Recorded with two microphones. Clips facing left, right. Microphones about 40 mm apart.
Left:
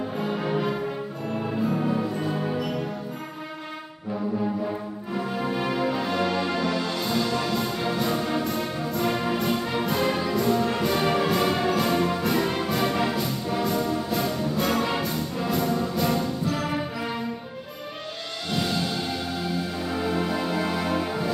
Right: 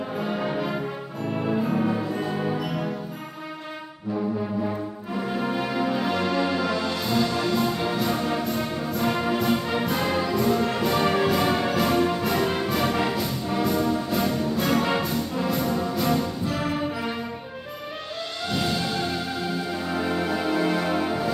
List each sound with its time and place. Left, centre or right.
0.2 s music: centre
5.1 s music: centre
18.5 s music: centre